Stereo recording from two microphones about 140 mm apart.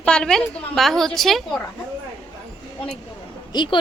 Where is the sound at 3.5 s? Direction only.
30° left (ahead or behind).